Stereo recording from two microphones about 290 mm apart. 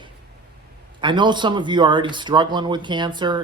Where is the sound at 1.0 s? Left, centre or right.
Centre.